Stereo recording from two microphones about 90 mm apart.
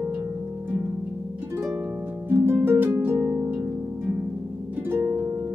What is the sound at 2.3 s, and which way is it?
Harp, 25° right (ahead or behind).